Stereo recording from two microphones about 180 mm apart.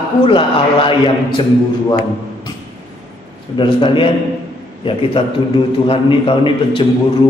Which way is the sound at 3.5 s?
30° left (ahead or behind).